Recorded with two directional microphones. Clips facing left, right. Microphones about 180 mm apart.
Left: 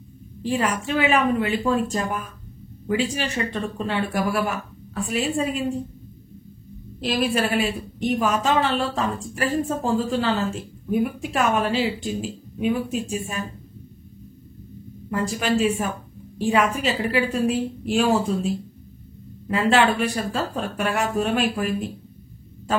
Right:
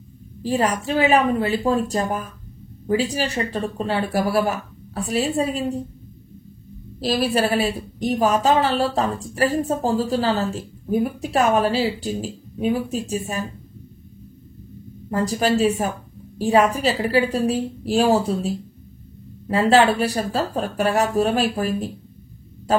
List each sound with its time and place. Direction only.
0.4 s a woman's voice: 40° right (ahead or behind)
7.0 s a woman's voice: 40° right (ahead or behind)
15.0 s a woman's voice: 35° right (ahead or behind)